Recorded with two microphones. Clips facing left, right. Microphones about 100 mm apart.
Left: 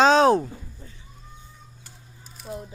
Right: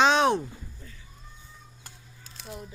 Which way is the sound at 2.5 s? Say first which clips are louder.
Left 6 dB; 25° left (ahead or behind).